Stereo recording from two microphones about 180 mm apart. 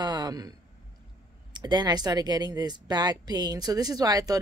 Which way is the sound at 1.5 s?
25° right (ahead or behind).